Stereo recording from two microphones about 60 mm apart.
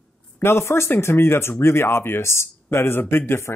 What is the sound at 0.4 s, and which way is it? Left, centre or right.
Speech, left.